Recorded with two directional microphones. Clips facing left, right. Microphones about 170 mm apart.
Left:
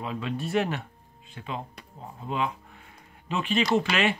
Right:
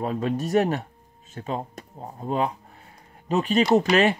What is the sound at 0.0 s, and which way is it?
Speech, 45° right (ahead or behind).